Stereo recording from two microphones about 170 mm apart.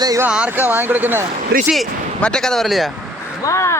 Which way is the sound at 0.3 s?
5° right (ahead or behind).